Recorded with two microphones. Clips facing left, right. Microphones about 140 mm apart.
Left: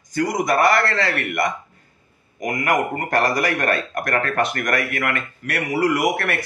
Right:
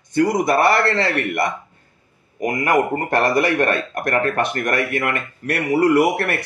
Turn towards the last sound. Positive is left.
turn(degrees=-30)  # may be behind; listen again after turning